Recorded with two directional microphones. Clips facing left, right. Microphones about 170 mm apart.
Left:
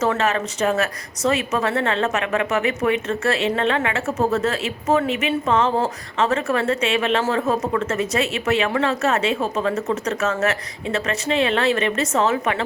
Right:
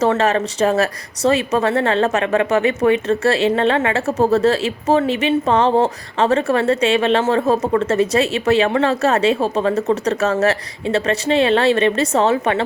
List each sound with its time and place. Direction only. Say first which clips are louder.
0.0 s speech: right 4 dB; 35° right (ahead or behind)